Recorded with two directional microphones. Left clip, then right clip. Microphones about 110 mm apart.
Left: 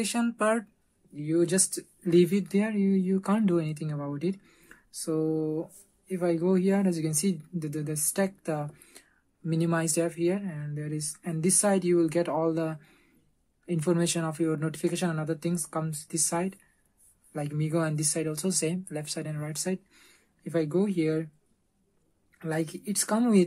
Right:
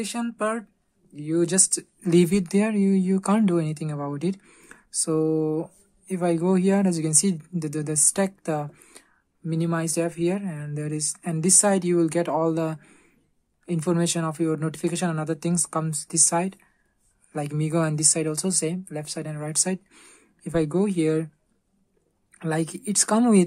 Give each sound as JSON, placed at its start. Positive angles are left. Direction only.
{"t": 0.0, "sound": "speech", "side_deg": 0}
{"t": 1.1, "sound": "speech", "side_deg": -35}
{"t": 1.7, "sound": "speech", "side_deg": -55}
{"t": 9.5, "sound": "speech", "side_deg": -20}
{"t": 18.5, "sound": "speech", "side_deg": -25}
{"t": 22.4, "sound": "speech", "side_deg": -45}